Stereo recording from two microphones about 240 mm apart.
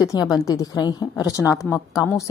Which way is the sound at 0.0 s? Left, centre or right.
Centre.